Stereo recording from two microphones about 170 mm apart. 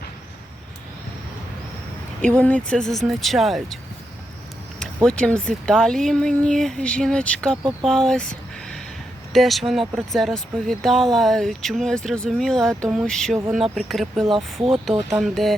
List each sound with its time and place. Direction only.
2.4 s speech: 5° left (ahead or behind)
5.0 s speech: 5° left (ahead or behind)
14.3 s speech: 30° right (ahead or behind)
15.2 s speech: centre (ahead or behind)